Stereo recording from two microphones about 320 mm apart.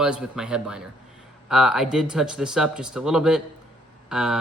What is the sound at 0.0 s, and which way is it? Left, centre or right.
Speech, centre.